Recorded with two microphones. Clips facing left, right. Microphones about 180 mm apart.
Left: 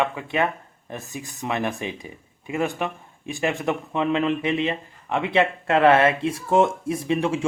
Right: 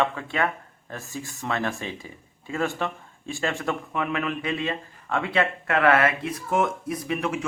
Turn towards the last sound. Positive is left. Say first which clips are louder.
# left 4 dB
turn(degrees=30)  # may be behind; listen again after turning